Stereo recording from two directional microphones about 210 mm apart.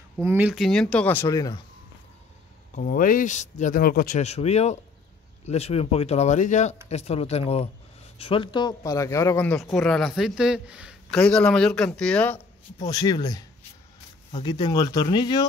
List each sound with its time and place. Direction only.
0.2 s a man's voice: 10° right (ahead or behind); by 1.6 s 15° left (ahead or behind)
2.7 s a man's voice: 40° left (ahead or behind); by 12.4 s 5° left (ahead or behind)
12.7 s speech: 20° left (ahead or behind)
14.4 s speech: 20° left (ahead or behind)